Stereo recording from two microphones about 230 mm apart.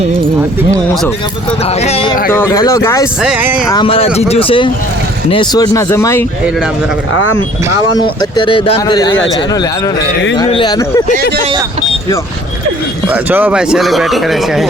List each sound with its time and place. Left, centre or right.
1.6 s speech: left
2.3 s speech: centre
3.2 s speech: centre
3.7 s speech: left
8.2 s speech: left
13.1 s speech: centre